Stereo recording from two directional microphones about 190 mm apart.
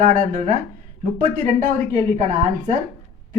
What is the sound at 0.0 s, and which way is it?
Speech, 40° right (ahead or behind).